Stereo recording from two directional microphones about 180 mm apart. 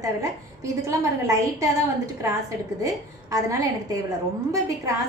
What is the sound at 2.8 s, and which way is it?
A woman's voice, 20° right (ahead or behind).